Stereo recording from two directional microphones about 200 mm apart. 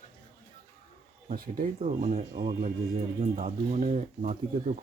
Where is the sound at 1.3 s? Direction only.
40° right (ahead or behind).